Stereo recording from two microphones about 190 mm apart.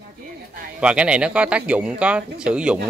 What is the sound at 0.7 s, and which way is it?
Speech, 5° right (ahead or behind).